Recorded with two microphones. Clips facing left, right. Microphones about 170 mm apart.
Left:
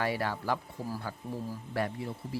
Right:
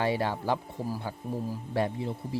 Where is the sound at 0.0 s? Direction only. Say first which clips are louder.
Right 4 dB; 25° right (ahead or behind).